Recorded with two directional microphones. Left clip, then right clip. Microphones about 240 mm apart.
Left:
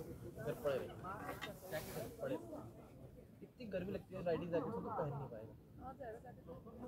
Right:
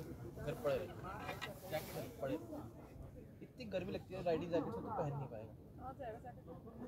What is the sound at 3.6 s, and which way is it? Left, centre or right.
Speech, right.